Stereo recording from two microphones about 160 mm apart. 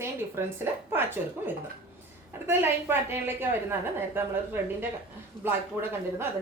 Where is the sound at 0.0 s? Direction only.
15° right (ahead or behind).